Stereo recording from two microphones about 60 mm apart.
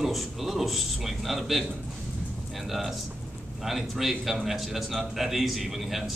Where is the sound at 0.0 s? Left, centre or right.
Centre.